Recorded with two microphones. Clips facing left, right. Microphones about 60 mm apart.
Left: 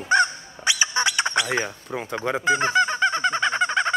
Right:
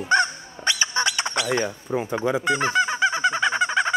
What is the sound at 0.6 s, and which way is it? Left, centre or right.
Squawk, centre.